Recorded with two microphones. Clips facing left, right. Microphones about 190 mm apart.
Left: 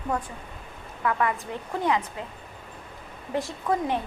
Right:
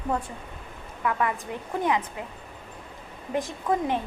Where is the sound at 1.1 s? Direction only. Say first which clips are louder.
Left 1 dB; 20° right (ahead or behind).